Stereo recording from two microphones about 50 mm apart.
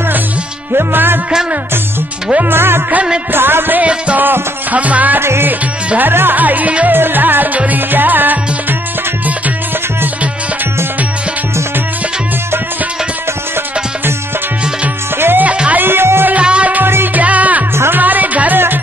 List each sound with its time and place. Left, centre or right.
0.7 s music: right
2.5 s music: right
4.7 s music: right
5.2 s music: right
5.9 s music: right
6.9 s music: right
15.1 s music: right
15.4 s music: right
15.8 s music: right
16.4 s music: right
16.8 s music: right
17.2 s music: right